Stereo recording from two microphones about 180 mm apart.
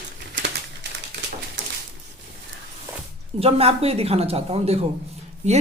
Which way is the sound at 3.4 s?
35° right (ahead or behind).